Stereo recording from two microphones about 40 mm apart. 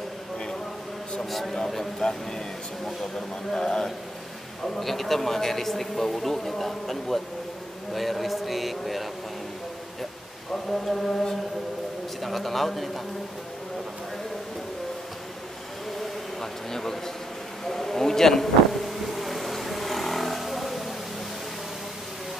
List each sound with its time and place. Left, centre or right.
1.3 s speech: centre
3.5 s speech: centre
4.7 s speech: centre
10.5 s speech: centre
16.0 s a sound: centre
17.6 s vehicle: centre